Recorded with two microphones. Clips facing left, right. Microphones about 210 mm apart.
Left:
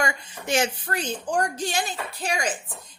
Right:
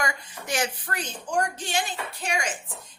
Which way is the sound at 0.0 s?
25° left (ahead or behind).